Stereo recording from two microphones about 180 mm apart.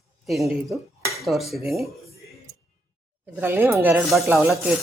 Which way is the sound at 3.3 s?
15° right (ahead or behind).